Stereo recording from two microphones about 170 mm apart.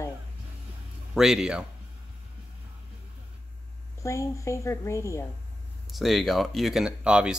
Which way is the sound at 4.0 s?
15° left (ahead or behind).